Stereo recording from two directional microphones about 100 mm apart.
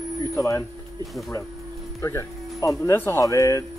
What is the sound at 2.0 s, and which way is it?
Speech, 30° left (ahead or behind).